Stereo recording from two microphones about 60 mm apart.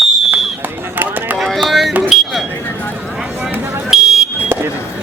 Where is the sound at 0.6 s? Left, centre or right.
Right.